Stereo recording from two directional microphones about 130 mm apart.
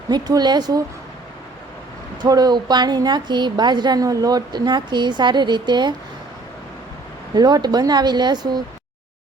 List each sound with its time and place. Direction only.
0.1 s a woman's voice: 30° right (ahead or behind)
2.2 s a woman's voice: 30° right (ahead or behind)
7.3 s a woman's voice: 30° right (ahead or behind)